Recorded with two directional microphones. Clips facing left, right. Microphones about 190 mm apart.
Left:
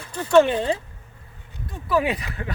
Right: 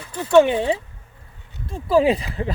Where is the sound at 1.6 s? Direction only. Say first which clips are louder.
Right 6 dB; 30° right (ahead or behind).